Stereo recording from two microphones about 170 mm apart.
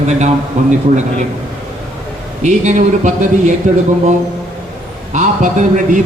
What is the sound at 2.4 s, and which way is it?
A man's voice, 45° right (ahead or behind).